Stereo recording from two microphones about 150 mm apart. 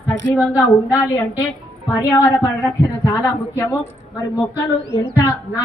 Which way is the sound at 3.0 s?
20° left (ahead or behind).